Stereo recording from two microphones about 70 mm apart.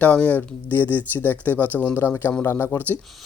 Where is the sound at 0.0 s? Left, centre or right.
Left.